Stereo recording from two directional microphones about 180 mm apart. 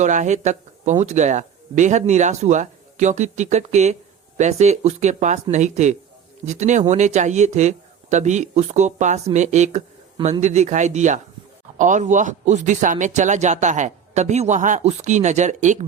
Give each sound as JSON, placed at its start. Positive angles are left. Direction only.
{"t": 0.0, "sound": "speech", "side_deg": -45}